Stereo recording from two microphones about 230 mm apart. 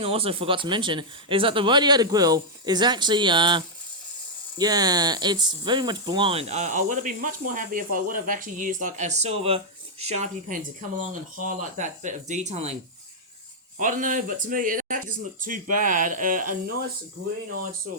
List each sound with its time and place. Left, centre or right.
0.0 s speech: right
13.7 s speech: right